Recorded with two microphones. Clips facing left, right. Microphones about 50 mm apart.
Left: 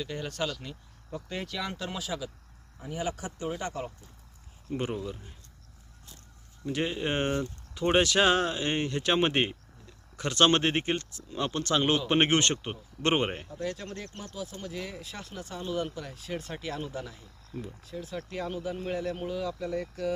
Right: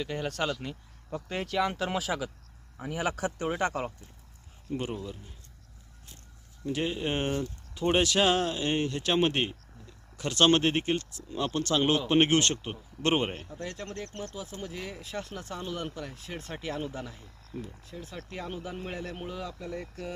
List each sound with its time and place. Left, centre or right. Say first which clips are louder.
0.0 s speech: right 2 dB; right
0.4 s speech: right 2 dB; right
1.8 s speech: right 4 dB; right
3.0 s speech: right 3 dB; right
3.6 s speech: right 5 dB; right
4.7 s speech: left 1 dB; centre
6.7 s speech: even; centre
13.6 s speech: left 2 dB; right
14.6 s speech: left 1 dB; right
17.5 s speech: left 2 dB; centre
18.3 s speech: left 3 dB; right
19.5 s speech: left 5 dB; centre